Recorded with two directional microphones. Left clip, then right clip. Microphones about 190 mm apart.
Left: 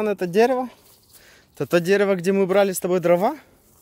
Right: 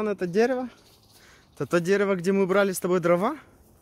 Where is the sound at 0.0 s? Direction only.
20° left (ahead or behind).